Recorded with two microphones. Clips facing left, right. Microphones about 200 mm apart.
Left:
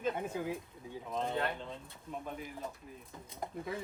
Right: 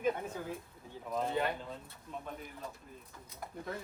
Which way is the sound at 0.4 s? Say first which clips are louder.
Left 4 dB; 10° left (ahead or behind).